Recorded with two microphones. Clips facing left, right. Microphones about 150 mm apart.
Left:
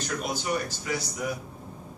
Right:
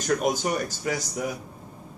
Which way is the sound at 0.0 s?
45° right (ahead or behind).